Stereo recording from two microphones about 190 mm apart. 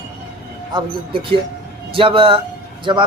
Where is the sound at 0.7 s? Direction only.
25° right (ahead or behind).